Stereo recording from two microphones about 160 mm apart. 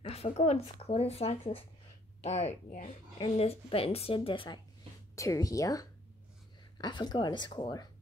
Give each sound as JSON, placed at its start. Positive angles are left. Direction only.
{"t": 0.1, "sound": "speech", "side_deg": 40}
{"t": 5.1, "sound": "speech", "side_deg": 20}